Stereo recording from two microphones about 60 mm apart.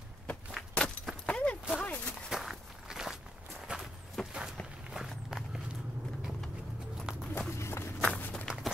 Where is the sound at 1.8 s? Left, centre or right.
Left.